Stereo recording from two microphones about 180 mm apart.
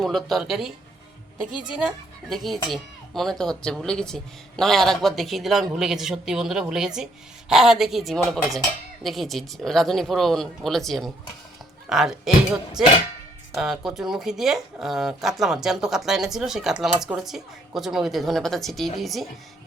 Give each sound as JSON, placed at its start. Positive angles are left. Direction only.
{"t": 0.0, "sound": "speech", "side_deg": 0}
{"t": 13.5, "sound": "speech", "side_deg": 0}